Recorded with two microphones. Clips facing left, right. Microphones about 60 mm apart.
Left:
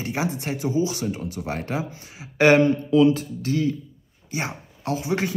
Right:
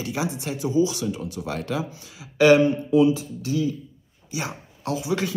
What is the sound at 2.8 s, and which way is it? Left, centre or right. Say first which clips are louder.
Speech: left 1 dB; left.